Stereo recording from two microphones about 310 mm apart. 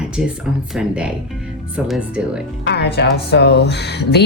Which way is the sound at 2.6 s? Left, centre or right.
Left.